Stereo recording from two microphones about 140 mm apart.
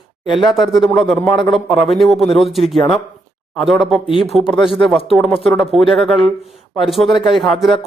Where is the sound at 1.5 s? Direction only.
Centre (ahead or behind).